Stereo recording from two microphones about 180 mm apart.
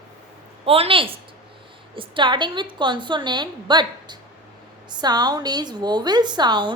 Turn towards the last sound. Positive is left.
turn(degrees=-25)  # may be behind; listen again after turning